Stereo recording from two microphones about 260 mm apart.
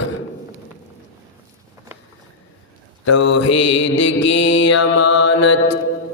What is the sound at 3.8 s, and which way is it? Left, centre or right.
Mantra, left.